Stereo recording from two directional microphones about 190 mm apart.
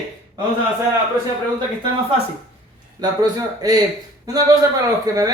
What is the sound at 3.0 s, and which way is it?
Speech, 20° right (ahead or behind).